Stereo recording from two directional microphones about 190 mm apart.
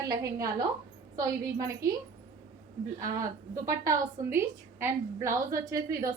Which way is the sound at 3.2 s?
15° right (ahead or behind).